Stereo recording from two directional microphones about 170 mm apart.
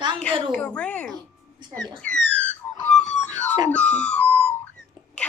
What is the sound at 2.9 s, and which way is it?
Wail, 45° left (ahead or behind).